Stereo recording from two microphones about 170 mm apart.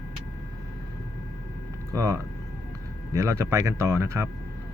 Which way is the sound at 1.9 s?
20° right (ahead or behind).